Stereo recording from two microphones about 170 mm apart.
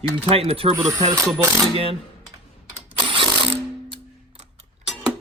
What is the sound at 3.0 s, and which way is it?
Music, 30° right (ahead or behind).